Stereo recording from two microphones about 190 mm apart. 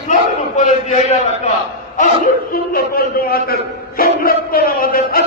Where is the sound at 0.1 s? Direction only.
40° left (ahead or behind).